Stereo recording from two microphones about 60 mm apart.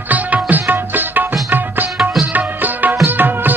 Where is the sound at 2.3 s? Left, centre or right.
Right.